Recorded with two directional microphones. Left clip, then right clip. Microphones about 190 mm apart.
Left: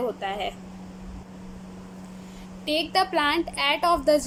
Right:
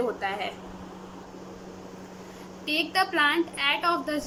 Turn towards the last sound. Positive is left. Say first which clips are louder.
# left 5 dB
turn(degrees=30)  # may be behind; listen again after turning